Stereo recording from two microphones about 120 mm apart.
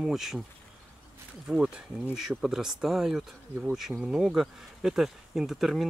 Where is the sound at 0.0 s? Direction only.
Centre (ahead or behind).